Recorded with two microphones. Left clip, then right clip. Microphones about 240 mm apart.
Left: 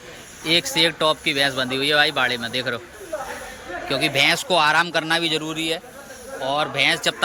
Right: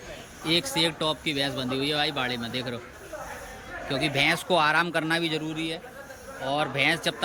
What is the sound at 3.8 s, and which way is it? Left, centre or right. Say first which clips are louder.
A man's voice: left 6 dB; centre.